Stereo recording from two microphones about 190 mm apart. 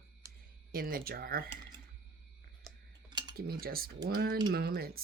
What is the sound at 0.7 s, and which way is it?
Speech, 50° right (ahead or behind).